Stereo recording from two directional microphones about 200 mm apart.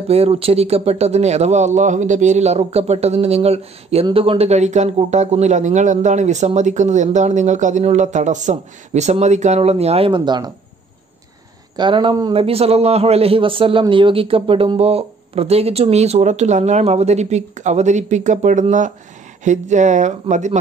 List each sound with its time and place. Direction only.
0.1 s speech: 30° right (ahead or behind)
11.7 s speech: 25° right (ahead or behind)